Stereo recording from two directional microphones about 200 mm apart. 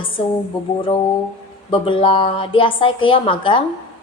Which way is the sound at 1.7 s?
25° left (ahead or behind).